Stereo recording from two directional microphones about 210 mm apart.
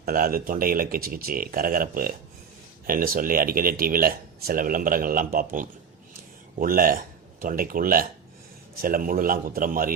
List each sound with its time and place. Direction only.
0.0 s a man's voice: 45° right (ahead or behind)